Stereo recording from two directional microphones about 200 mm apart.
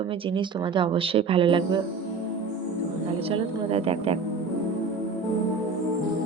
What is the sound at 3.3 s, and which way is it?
Speech, 30° right (ahead or behind).